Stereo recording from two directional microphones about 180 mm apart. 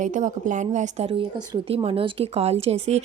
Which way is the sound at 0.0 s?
45° right (ahead or behind).